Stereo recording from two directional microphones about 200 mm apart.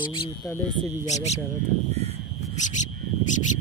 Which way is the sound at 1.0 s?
35° left (ahead or behind).